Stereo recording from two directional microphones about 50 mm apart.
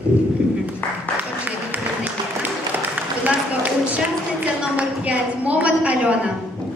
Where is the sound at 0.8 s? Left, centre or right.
Left.